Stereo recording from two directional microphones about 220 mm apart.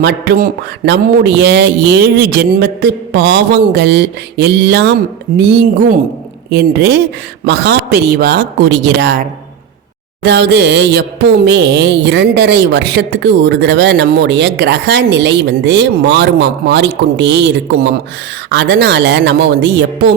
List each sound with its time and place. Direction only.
0.0 s mantra: 50° right (ahead or behind)
10.2 s mantra: 50° right (ahead or behind)